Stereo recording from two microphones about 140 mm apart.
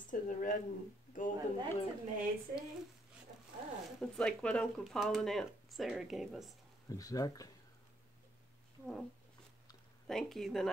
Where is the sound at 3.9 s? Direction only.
5° left (ahead or behind).